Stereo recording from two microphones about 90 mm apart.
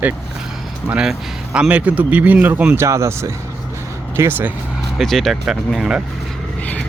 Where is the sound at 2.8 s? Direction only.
35° right (ahead or behind).